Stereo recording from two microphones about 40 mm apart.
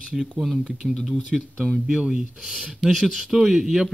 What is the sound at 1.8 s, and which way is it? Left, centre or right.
Speech, right.